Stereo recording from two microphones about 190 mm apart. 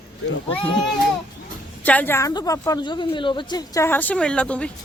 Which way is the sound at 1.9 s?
10° left (ahead or behind).